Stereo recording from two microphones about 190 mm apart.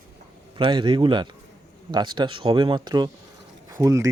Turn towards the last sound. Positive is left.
turn(degrees=-15)  # may be behind; listen again after turning